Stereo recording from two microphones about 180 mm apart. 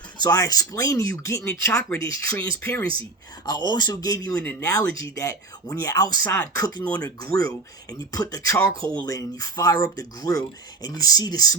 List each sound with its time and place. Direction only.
0.2 s speech: 20° left (ahead or behind)
3.4 s speech: 20° left (ahead or behind)